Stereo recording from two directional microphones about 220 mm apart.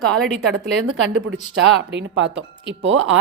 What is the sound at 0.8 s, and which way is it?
Speech, 70° right (ahead or behind).